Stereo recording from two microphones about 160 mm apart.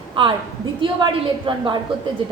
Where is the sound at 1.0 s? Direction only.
30° right (ahead or behind).